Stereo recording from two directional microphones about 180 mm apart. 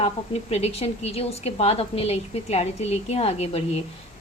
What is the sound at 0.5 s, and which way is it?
Speech, 35° left (ahead or behind).